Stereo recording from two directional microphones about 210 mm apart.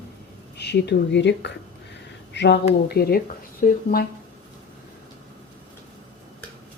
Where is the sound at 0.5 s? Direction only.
50° left (ahead or behind).